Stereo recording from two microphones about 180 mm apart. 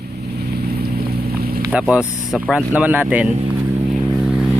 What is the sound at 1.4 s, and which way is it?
Vehicle, 60° right (ahead or behind).